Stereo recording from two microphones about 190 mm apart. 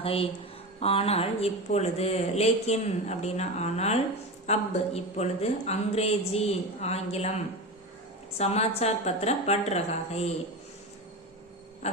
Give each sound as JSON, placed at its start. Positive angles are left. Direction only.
{"t": 0.0, "sound": "speech", "side_deg": 30}
{"t": 8.4, "sound": "speech", "side_deg": 35}